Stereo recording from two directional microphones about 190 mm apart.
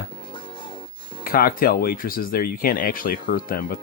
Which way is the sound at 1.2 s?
50° left (ahead or behind).